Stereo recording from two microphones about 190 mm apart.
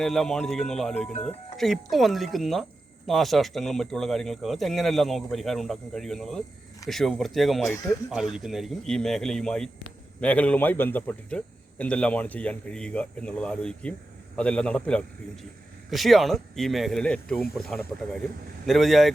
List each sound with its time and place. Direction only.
0.0 s a man's voice: centre (ahead or behind)